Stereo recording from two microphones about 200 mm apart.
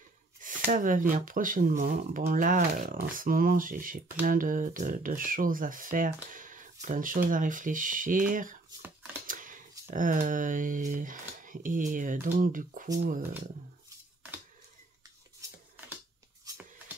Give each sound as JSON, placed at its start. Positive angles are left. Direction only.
{"t": 0.7, "sound": "speech", "side_deg": -40}